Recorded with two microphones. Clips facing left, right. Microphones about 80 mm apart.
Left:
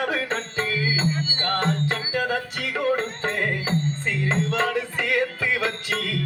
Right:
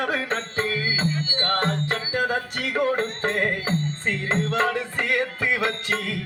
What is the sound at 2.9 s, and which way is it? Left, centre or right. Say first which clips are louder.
Music: right 1 dB; right.